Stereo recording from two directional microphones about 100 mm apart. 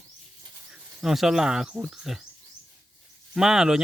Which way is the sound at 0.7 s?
5° right (ahead or behind).